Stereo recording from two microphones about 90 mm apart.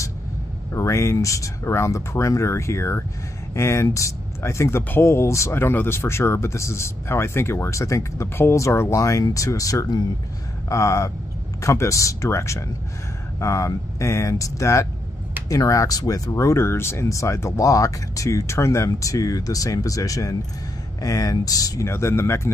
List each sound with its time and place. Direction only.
0.7 s speech: 35° left (ahead or behind)
21.8 s speech: 30° left (ahead or behind)